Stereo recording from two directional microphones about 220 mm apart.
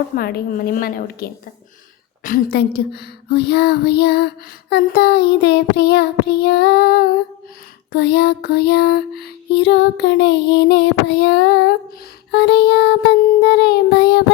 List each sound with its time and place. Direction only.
0.2 s a woman's voice: 45° left (ahead or behind)
2.2 s music: 40° left (ahead or behind)